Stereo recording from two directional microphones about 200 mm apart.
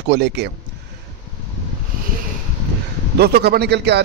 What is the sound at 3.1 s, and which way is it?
Speech, 55° right (ahead or behind).